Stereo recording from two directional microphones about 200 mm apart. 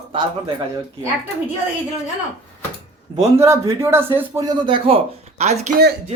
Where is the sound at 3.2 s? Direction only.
15° right (ahead or behind); by 5.7 s 35° right (ahead or behind).